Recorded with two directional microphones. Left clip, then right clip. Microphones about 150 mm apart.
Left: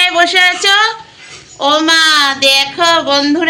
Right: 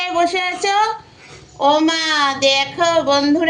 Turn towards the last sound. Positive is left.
turn(degrees=-10)  # may be behind; listen again after turning